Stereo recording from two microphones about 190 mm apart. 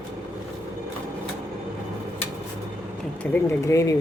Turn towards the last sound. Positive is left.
turn(degrees=15)  # may be behind; listen again after turning